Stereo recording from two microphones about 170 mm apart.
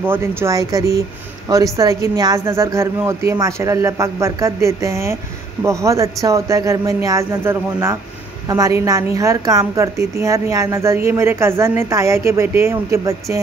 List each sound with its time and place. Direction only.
0.0 s a woman's voice: 15° right (ahead or behind)